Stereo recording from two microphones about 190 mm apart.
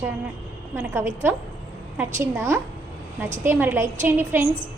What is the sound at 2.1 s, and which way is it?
A woman's voice, 15° right (ahead or behind).